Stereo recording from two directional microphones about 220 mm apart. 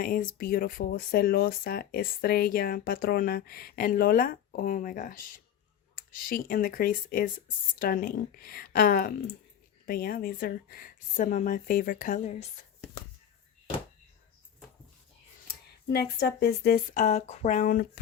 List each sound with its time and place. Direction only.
0.0 s speech: 40° left (ahead or behind)
15.9 s speech: 50° left (ahead or behind)